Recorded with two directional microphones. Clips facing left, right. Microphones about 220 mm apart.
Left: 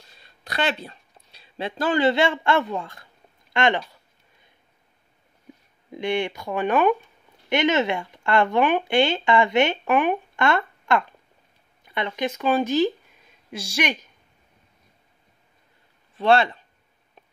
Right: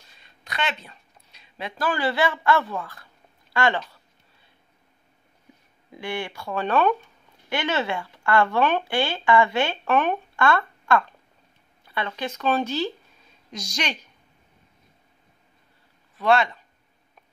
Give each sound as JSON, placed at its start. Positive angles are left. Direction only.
{"t": 0.2, "sound": "speech", "side_deg": 35}
{"t": 3.8, "sound": "a sound", "side_deg": 15}
{"t": 5.9, "sound": "speech", "side_deg": 20}
{"t": 16.2, "sound": "speech", "side_deg": 30}